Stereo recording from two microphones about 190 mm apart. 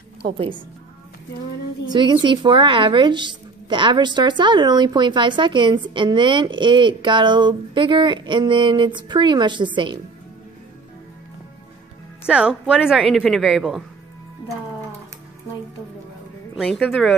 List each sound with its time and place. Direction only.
1.9 s a woman's voice: 25° right (ahead or behind)
12.3 s a woman's voice: 5° right (ahead or behind)
16.5 s a woman's voice: centre (ahead or behind)